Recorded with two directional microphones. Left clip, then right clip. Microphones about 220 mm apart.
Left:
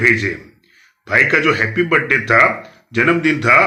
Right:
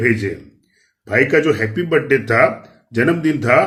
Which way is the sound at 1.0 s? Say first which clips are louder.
Left 2 dB; 20° right (ahead or behind).